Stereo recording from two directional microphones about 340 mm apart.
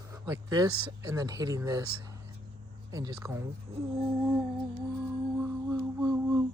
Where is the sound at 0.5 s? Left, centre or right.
Centre.